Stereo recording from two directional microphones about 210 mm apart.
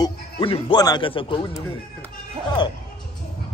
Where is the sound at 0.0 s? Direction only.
25° left (ahead or behind).